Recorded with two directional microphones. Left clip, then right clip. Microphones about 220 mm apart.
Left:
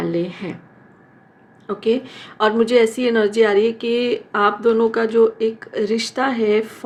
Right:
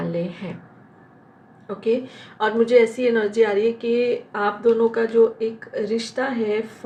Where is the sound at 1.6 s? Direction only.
50° left (ahead or behind).